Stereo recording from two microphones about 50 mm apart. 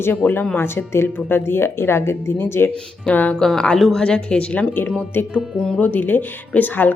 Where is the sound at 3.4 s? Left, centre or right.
Centre.